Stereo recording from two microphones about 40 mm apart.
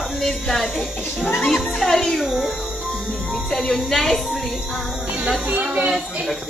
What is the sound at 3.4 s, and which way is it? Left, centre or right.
Speech, centre.